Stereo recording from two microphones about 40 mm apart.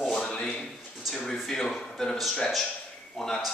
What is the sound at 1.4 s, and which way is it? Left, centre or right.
Speech, centre.